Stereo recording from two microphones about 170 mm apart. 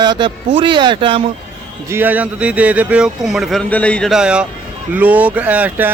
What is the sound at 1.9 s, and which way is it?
Speech, 10° right (ahead or behind).